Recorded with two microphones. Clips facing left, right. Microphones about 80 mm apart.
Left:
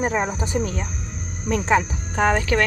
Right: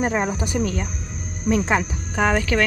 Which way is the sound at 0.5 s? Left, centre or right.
Left.